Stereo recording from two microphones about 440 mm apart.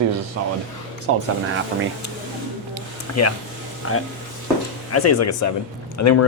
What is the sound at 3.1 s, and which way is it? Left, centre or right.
Speech, left.